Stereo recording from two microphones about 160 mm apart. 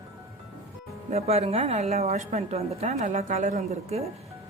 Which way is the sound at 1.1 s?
40° right (ahead or behind).